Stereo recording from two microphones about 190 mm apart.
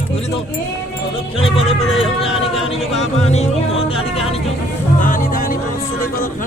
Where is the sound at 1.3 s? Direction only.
30° left (ahead or behind).